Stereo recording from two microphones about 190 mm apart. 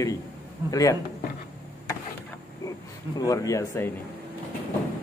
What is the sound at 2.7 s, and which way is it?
Speech, 15° left (ahead or behind).